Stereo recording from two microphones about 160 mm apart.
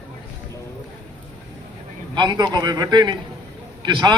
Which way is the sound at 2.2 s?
25° right (ahead or behind).